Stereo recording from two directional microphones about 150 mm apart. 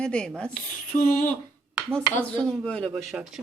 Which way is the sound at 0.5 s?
60° left (ahead or behind).